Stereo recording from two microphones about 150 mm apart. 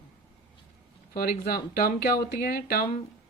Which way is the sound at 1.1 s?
90° left.